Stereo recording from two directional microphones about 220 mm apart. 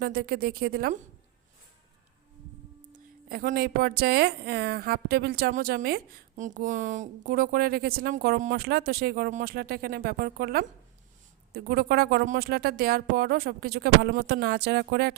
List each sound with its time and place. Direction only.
0.0 s speech: 45° right (ahead or behind)
2.9 s speech: 40° right (ahead or behind)